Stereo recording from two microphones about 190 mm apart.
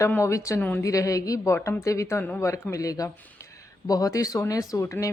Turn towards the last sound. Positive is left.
turn(degrees=15)  # may be behind; listen again after turning